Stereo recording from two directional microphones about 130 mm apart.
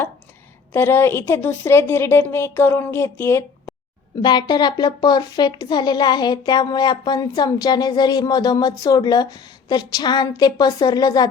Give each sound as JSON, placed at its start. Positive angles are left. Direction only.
{"t": 0.7, "sound": "a woman's voice", "side_deg": 20}